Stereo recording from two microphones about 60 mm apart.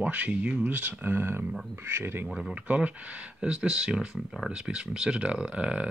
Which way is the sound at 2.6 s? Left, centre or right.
Right.